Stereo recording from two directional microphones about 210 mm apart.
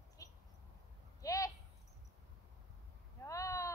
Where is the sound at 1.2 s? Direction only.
15° left (ahead or behind).